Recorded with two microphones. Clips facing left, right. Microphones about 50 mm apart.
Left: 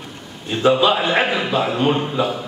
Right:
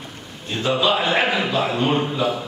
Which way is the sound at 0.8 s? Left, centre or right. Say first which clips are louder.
Left 2 dB; centre.